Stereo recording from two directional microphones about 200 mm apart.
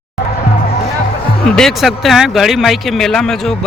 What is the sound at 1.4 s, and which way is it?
Speech, 5° left (ahead or behind).